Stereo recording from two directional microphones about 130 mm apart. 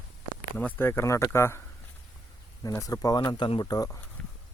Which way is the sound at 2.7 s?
25° left (ahead or behind).